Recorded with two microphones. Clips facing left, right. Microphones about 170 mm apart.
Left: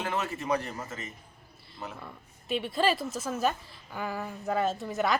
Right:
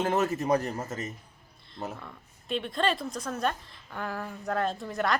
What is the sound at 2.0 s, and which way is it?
A woman's voice, 5° left (ahead or behind).